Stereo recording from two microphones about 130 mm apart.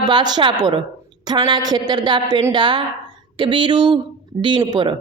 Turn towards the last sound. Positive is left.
turn(degrees=-35)  # may be behind; listen again after turning